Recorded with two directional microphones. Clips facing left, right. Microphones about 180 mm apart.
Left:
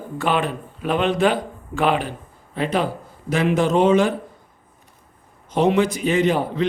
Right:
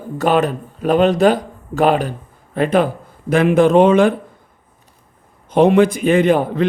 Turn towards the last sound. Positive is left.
turn(degrees=-55)  # may be behind; listen again after turning